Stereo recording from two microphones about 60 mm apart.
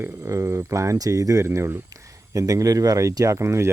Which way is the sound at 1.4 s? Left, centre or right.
Right.